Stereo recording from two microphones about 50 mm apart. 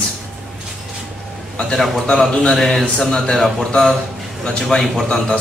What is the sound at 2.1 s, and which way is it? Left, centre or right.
Speech, centre.